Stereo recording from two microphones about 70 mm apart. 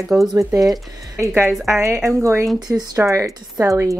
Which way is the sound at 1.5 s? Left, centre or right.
Centre.